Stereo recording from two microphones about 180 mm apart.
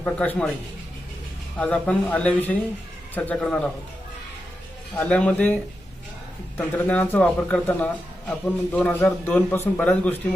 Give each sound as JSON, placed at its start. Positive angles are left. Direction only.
{"t": 0.0, "sound": "a man's voice", "side_deg": 5}
{"t": 1.5, "sound": "a man's voice", "side_deg": 5}
{"t": 4.9, "sound": "a man's voice", "side_deg": 5}
{"t": 6.6, "sound": "a man's voice", "side_deg": 10}